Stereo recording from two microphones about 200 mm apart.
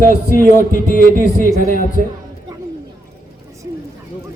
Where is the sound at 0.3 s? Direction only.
45° left (ahead or behind).